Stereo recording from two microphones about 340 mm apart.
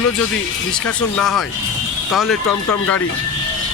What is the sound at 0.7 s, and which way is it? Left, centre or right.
Speech, centre.